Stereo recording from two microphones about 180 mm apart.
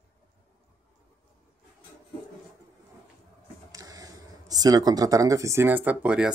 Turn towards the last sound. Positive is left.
turn(degrees=-5)  # may be behind; listen again after turning